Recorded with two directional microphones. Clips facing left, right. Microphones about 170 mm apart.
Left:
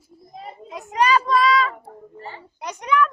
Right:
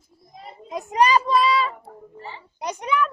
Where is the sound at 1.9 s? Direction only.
40° left (ahead or behind).